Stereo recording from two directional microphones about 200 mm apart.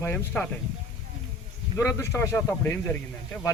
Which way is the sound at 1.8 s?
15° left (ahead or behind).